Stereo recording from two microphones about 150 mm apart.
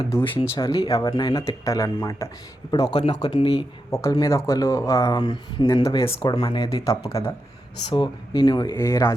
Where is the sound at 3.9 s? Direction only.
25° left (ahead or behind).